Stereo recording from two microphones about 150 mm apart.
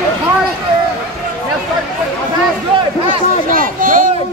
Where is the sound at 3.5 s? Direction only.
65° right (ahead or behind).